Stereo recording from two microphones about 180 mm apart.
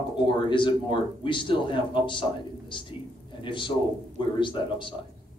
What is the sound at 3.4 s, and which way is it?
Speech, 25° left (ahead or behind).